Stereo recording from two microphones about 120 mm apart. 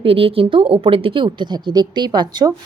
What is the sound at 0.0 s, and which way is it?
Speech, 50° right (ahead or behind).